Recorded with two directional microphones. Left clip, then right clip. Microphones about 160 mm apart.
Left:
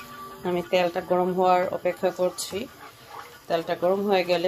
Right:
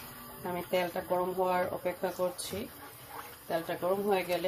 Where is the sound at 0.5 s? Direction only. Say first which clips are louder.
Left 8 dB; 65° left (ahead or behind).